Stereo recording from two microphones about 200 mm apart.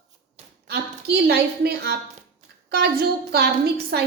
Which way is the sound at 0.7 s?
55° right (ahead or behind).